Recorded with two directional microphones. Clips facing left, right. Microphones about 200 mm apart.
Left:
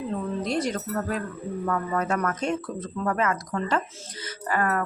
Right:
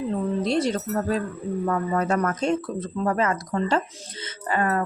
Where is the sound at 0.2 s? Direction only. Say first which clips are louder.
Right 5 dB; 25° right (ahead or behind).